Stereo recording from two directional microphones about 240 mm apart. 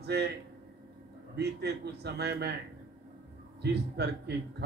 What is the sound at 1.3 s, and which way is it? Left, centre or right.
A man's voice, right.